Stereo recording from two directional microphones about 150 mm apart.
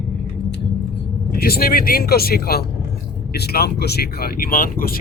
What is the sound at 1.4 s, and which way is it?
Speech, 85° left.